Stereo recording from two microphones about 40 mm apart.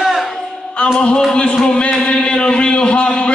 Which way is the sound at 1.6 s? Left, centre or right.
Left.